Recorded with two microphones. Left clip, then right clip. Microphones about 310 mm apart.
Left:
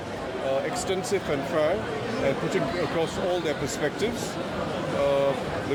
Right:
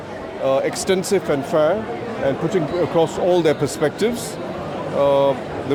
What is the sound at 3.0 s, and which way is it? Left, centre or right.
Speech, right.